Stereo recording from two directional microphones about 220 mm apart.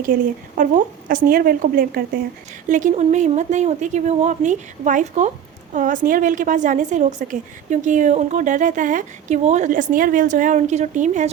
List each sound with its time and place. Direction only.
0.0 s a woman's voice: 40° right (ahead or behind)